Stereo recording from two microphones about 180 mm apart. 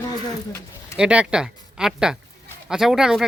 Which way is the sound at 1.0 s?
5° right (ahead or behind).